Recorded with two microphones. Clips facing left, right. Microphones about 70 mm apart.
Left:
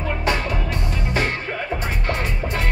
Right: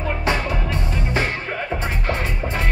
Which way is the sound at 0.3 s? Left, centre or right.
Right.